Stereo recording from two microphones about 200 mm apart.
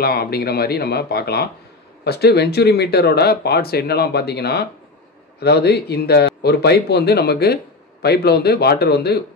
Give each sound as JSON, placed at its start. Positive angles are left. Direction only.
{"t": 0.0, "sound": "speech", "side_deg": 50}